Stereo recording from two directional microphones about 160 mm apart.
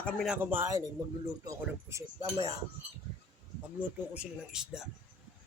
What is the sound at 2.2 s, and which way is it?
Cutlery, 40° right (ahead or behind).